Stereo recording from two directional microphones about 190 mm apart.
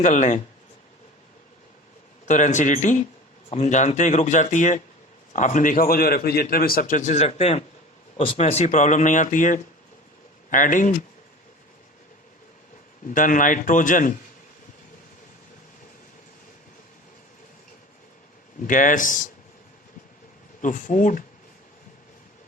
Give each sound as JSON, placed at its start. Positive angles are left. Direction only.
{"t": 0.0, "sound": "speech", "side_deg": 40}
{"t": 2.2, "sound": "a man's voice", "side_deg": 40}
{"t": 13.1, "sound": "a man's voice", "side_deg": 45}
{"t": 18.6, "sound": "a man's voice", "side_deg": 45}
{"t": 20.6, "sound": "a man's voice", "side_deg": 40}